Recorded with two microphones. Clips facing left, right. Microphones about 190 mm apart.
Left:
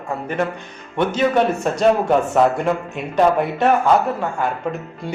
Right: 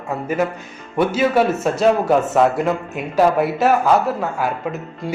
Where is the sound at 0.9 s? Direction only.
5° right (ahead or behind).